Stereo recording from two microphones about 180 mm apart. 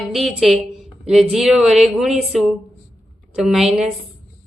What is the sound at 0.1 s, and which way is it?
A woman's voice, centre (ahead or behind).